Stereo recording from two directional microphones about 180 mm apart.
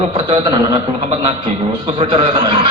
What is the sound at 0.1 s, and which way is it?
A man's voice, 30° right (ahead or behind).